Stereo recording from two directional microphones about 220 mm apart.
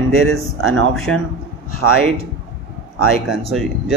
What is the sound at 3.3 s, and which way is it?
Speech, centre (ahead or behind).